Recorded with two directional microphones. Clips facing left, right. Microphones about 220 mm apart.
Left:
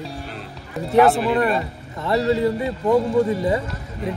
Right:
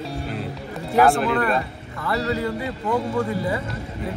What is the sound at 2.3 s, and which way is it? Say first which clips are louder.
Speech: left 5 dB; 25° left (ahead or behind).